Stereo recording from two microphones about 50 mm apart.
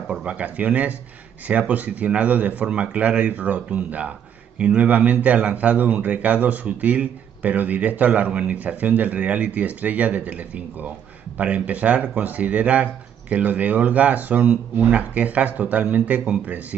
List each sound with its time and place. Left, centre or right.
0.1 s a man's voice: right